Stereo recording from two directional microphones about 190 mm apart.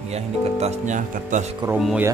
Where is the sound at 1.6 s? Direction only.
5° right (ahead or behind).